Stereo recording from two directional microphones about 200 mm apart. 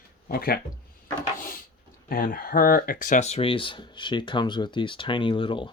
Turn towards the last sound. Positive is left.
turn(degrees=25)  # may be behind; listen again after turning